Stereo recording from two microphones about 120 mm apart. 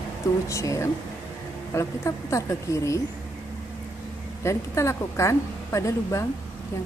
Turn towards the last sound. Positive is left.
turn(degrees=25)  # may be behind; listen again after turning